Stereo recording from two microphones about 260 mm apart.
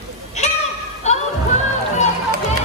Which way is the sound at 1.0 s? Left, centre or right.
Left.